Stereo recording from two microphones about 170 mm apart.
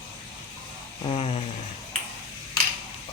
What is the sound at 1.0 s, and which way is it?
Speech, 35° left (ahead or behind).